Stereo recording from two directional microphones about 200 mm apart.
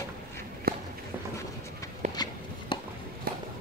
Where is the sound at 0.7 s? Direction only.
50° right (ahead or behind).